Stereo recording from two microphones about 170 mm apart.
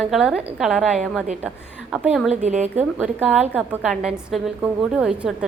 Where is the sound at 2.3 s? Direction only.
45° right (ahead or behind).